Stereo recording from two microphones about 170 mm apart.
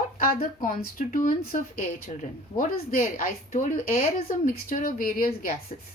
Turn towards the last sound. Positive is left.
turn(degrees=55)  # may be behind; listen again after turning